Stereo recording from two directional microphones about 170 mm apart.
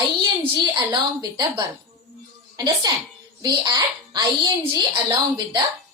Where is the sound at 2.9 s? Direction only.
25° right (ahead or behind).